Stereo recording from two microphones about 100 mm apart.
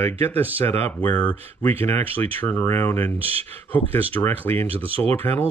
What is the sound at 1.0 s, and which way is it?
Speech, 15° left (ahead or behind).